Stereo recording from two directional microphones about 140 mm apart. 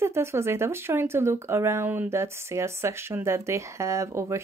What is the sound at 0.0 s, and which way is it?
Speech, 20° right (ahead or behind).